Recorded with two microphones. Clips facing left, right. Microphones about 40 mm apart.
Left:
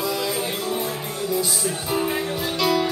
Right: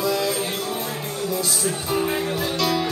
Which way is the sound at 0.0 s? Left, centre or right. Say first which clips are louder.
Right 3 dB; centre.